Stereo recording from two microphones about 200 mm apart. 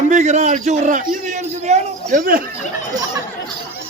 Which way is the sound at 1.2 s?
35° right (ahead or behind).